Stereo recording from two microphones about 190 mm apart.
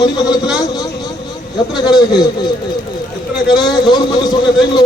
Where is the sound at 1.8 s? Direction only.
20° left (ahead or behind).